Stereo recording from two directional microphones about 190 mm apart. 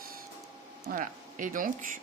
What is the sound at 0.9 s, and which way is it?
Speech, 45° right (ahead or behind).